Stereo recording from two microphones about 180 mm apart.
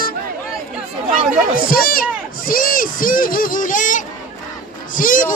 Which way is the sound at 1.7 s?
55° left (ahead or behind).